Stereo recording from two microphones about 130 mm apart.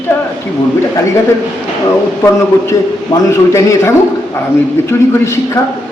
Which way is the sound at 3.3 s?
20° left (ahead or behind).